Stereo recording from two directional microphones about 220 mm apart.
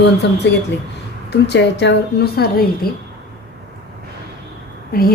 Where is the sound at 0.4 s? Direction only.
55° left (ahead or behind).